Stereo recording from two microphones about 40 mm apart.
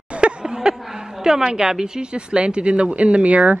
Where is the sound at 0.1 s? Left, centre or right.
Right.